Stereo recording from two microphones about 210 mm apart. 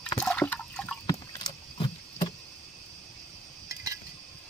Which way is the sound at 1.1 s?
25° left (ahead or behind).